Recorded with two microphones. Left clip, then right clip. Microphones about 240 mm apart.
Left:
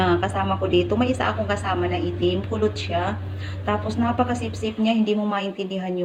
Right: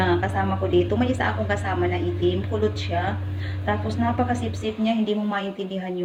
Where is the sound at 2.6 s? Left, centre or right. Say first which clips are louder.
Left 2 dB; centre.